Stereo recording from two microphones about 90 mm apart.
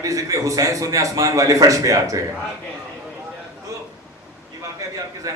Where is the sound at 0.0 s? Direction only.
40° right (ahead or behind).